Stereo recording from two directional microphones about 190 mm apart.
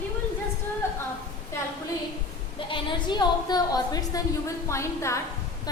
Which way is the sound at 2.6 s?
25° left (ahead or behind).